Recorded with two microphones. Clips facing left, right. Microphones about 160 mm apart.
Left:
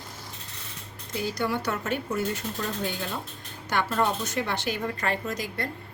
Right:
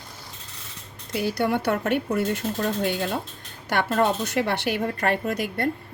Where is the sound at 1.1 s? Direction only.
60° right (ahead or behind).